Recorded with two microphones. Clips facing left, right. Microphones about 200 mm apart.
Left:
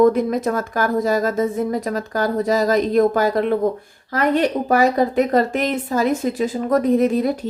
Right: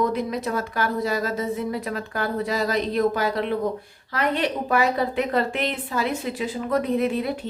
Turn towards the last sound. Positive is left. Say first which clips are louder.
# left 6 dB
turn(degrees=40)  # may be behind; listen again after turning